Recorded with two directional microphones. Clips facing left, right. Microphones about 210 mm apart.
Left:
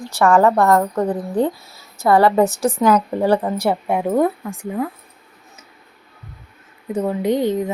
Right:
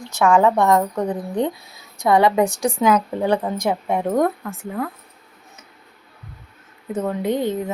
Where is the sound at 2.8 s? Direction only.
10° right (ahead or behind).